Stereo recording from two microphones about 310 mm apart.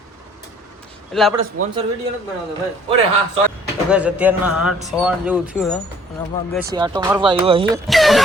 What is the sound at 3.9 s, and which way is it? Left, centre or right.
Speech, centre.